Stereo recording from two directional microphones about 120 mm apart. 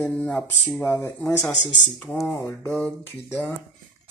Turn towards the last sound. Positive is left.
turn(degrees=20)  # may be behind; listen again after turning